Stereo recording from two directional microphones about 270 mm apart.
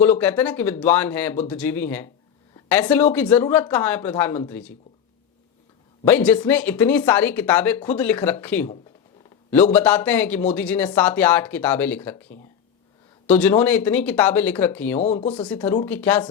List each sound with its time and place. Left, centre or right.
0.0 s speech: centre
6.1 s speech: centre
9.7 s speech: centre
15.0 s speech: left
15.4 s speech: centre